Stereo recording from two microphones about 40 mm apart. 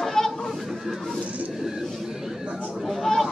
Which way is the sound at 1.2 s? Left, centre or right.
Right.